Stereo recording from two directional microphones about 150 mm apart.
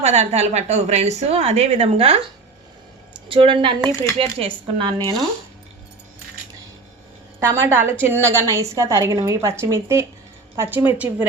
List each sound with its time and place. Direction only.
0.0 s a woman's voice: 45° right (ahead or behind)
7.3 s a woman's voice: 15° right (ahead or behind)